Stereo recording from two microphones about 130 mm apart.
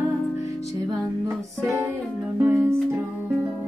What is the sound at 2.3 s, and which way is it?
Music, 20° right (ahead or behind).